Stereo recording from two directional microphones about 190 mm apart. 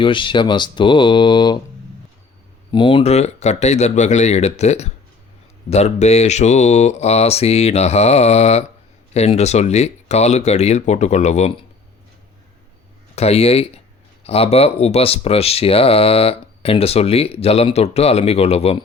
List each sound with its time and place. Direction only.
0.0 s speech: 25° left (ahead or behind)
2.7 s speech: 25° left (ahead or behind)
13.1 s speech: 35° left (ahead or behind)